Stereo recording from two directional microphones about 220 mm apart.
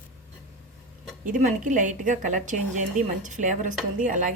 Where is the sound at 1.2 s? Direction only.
35° right (ahead or behind).